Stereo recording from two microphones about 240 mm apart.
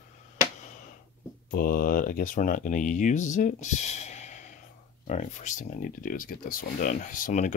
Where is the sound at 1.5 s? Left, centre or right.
Left.